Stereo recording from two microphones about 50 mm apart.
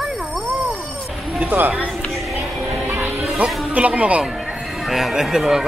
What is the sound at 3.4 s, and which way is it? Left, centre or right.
Speech, right.